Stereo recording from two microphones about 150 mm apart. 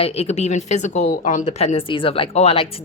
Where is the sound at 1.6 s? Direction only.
40° left (ahead or behind).